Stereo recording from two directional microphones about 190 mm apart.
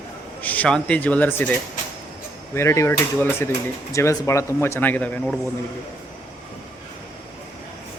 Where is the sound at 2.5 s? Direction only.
15° left (ahead or behind).